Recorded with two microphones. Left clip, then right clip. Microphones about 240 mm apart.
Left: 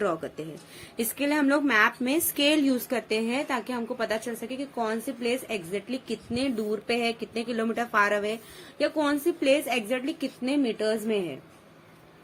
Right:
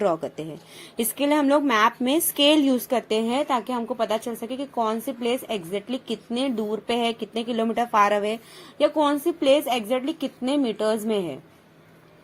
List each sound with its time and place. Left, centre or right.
0.0 s a woman's voice: centre